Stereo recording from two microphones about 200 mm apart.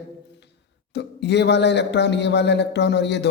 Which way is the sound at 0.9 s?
60° left (ahead or behind).